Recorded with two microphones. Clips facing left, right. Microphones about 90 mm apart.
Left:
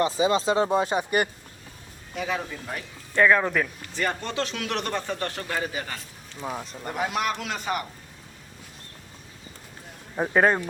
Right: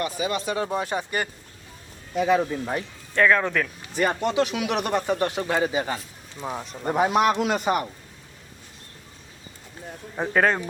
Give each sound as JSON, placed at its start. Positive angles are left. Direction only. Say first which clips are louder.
{"t": 0.0, "sound": "speech", "louder": "left 4 dB", "side_deg": 25}
{"t": 2.1, "sound": "speech", "louder": "right 9 dB", "side_deg": -25}
{"t": 3.2, "sound": "speech", "louder": "even", "side_deg": 5}
{"t": 3.9, "sound": "speech", "louder": "right 6 dB", "side_deg": -15}
{"t": 6.4, "sound": "speech", "louder": "right 1 dB", "side_deg": -5}
{"t": 6.8, "sound": "speech", "louder": "right 7 dB", "side_deg": -30}
{"t": 10.2, "sound": "speech", "louder": "left 1 dB", "side_deg": 10}